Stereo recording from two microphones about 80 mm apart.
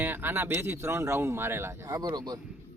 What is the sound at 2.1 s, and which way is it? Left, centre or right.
Speech, right.